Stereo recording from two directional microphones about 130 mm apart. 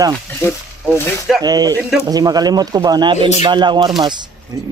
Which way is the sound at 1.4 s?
30° right (ahead or behind).